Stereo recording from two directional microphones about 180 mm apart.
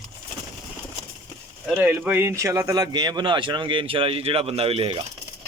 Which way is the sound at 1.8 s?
10° right (ahead or behind).